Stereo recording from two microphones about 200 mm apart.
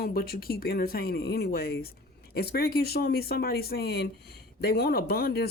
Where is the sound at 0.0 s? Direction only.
50° left (ahead or behind).